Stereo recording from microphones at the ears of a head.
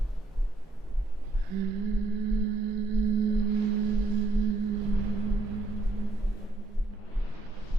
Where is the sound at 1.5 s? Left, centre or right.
Right.